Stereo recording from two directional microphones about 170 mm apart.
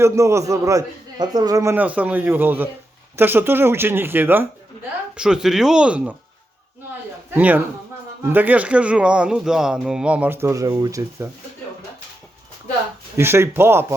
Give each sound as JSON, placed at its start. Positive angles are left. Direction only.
{"t": 0.0, "sound": "speech", "side_deg": -15}
{"t": 7.3, "sound": "speech", "side_deg": -10}
{"t": 13.1, "sound": "speech", "side_deg": -15}